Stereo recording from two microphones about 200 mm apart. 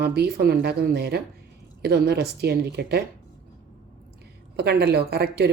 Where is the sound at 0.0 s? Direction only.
55° right (ahead or behind).